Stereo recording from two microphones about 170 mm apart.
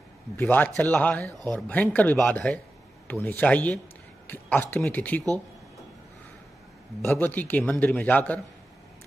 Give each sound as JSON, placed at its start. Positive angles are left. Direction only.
{"t": 0.4, "sound": "a man's voice", "side_deg": 10}
{"t": 7.0, "sound": "a man's voice", "side_deg": 10}